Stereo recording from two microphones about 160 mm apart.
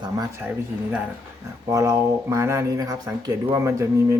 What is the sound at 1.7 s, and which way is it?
Speech, 20° right (ahead or behind).